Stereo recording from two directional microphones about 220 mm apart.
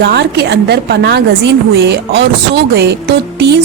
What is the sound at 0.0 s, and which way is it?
A woman's voice, 50° right (ahead or behind).